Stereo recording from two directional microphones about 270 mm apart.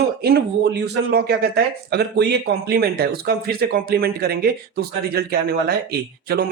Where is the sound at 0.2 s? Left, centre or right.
Right.